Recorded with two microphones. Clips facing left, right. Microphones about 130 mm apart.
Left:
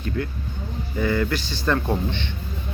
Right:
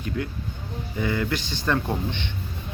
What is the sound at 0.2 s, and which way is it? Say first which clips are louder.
Speech: left 2 dB; 15° right (ahead or behind).